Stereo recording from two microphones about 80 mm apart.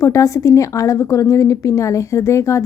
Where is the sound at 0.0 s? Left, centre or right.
Left.